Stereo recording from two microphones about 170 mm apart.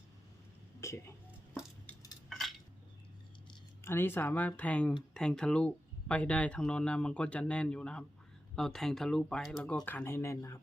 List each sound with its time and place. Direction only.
0.8 s speech: 15° left (ahead or behind)
3.8 s speech: 15° left (ahead or behind)